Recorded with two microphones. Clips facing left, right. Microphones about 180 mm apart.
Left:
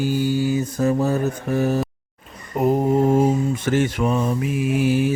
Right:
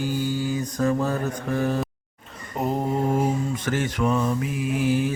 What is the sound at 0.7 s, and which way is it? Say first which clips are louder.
Mantra: left 2 dB; 20° left (ahead or behind).